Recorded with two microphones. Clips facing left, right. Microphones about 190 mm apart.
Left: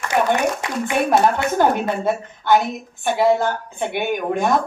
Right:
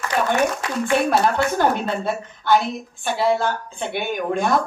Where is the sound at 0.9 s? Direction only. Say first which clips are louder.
Left 2 dB; 20° left (ahead or behind).